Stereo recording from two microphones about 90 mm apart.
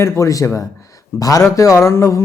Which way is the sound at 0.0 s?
35° left (ahead or behind).